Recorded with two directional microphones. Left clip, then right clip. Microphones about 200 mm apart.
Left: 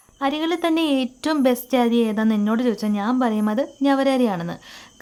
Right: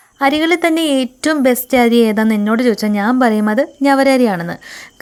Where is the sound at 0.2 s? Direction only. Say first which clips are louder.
Right 9 dB; 25° right (ahead or behind).